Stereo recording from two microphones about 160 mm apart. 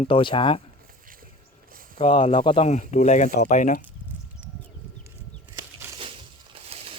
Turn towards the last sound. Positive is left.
turn(degrees=-40)  # may be behind; listen again after turning